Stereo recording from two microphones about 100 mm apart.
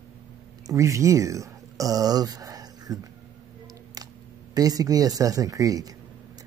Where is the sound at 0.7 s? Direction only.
30° right (ahead or behind).